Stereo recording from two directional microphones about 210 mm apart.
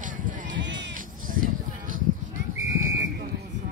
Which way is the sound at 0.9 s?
40° right (ahead or behind).